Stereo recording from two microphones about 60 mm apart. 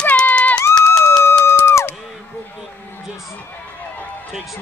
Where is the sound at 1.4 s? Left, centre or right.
Left.